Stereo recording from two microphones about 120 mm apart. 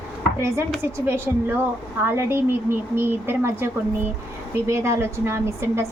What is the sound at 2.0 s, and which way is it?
A woman's voice, 20° right (ahead or behind).